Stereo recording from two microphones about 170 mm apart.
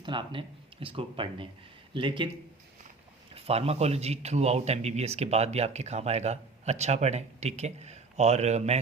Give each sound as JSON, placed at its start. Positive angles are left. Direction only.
{"t": 0.0, "sound": "speech", "side_deg": -25}
{"t": 3.3, "sound": "speech", "side_deg": -35}